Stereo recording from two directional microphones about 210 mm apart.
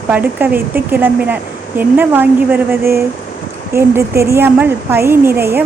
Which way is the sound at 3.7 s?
10° right (ahead or behind).